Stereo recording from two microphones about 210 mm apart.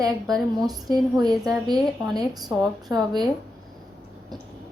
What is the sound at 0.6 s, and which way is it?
Speech, 20° right (ahead or behind).